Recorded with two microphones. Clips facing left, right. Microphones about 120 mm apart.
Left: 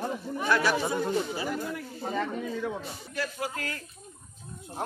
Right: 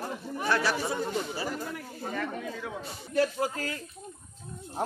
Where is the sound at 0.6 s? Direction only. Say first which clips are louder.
Left 2 dB; 35° right (ahead or behind).